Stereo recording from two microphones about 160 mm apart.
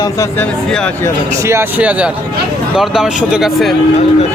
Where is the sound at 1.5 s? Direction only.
15° right (ahead or behind).